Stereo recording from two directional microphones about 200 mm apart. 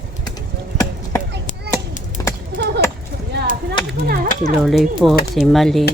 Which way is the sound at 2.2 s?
15° left (ahead or behind).